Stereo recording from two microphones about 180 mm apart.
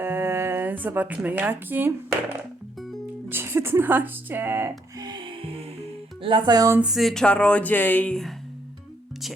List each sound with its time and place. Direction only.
0.0 s a sound: 10° right (ahead or behind)
3.2 s speech: 10° right (ahead or behind)
4.9 s music: 25° right (ahead or behind)
6.2 s speech: 25° right (ahead or behind)
6.8 s speech: centre (ahead or behind)